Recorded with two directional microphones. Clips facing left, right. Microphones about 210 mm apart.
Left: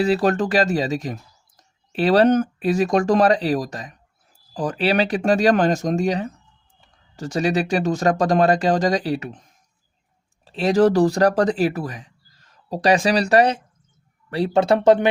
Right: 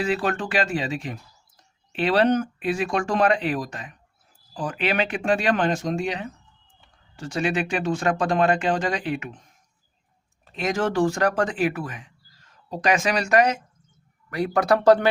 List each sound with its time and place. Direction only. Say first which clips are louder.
0.0 s speech: left 6 dB; 35° left (ahead or behind)
10.4 s speech: left 8 dB; 30° left (ahead or behind)